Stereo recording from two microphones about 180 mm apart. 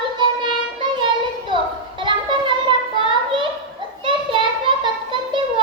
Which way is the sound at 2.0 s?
25° right (ahead or behind).